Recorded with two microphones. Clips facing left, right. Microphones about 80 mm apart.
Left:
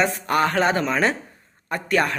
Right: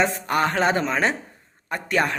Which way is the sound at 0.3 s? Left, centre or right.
Right.